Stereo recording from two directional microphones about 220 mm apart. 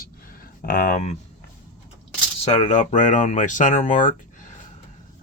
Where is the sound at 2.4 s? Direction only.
30° left (ahead or behind).